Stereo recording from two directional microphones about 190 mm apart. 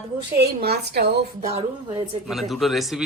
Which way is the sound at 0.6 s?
60° right (ahead or behind).